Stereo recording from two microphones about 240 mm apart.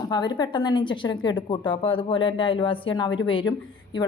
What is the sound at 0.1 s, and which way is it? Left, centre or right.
A woman's voice, centre.